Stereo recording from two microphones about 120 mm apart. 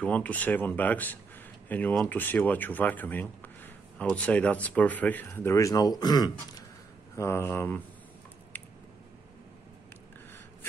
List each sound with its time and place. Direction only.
0.0 s speech: 10° left (ahead or behind); by 6.6 s 35° left (ahead or behind)
7.2 s speech: 20° left (ahead or behind)
8.5 s a sound: 15° left (ahead or behind)